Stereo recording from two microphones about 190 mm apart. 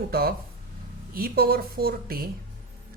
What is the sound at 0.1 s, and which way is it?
Speech, 55° right (ahead or behind).